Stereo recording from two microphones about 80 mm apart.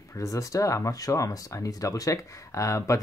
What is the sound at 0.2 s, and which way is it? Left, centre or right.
Speech, left.